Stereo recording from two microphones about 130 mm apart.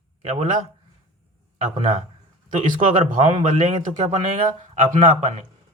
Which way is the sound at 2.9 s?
55° right (ahead or behind).